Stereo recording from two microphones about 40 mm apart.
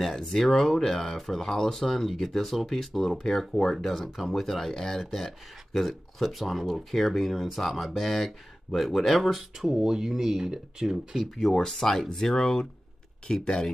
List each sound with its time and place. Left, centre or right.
0.0 s speech: centre
11.5 s speech: centre